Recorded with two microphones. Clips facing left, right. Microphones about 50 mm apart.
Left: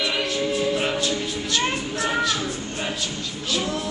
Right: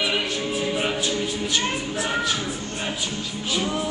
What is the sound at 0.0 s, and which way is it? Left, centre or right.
Music, centre.